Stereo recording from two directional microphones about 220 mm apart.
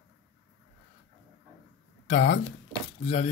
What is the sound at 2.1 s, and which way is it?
Speech, 35° left (ahead or behind).